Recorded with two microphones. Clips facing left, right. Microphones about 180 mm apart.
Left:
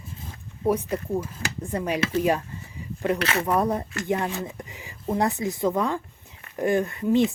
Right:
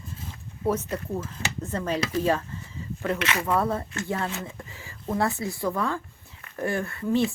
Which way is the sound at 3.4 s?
15° left (ahead or behind).